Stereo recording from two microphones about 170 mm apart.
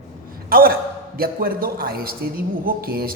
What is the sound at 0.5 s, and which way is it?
A man's voice, 60° right (ahead or behind).